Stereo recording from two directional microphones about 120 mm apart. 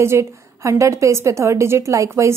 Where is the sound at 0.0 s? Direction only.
25° right (ahead or behind).